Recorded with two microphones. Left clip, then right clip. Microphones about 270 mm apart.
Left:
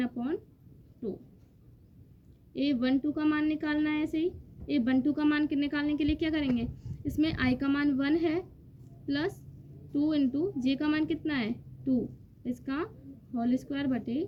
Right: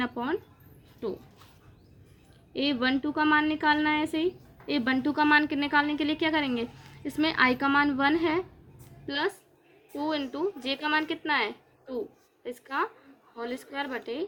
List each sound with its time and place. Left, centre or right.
0.0 s speech: left
2.5 s a woman's voice: left